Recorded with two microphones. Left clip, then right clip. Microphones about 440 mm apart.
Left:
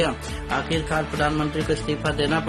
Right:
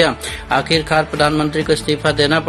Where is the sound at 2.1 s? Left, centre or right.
Left.